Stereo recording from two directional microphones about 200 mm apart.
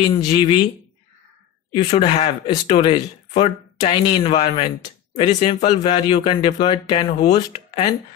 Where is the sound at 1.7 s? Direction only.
30° left (ahead or behind).